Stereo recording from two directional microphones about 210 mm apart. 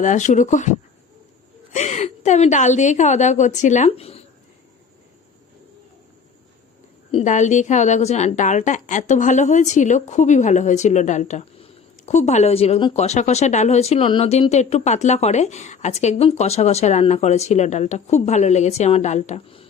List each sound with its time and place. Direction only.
0.0 s speech: 35° left (ahead or behind)
7.1 s speech: 35° left (ahead or behind)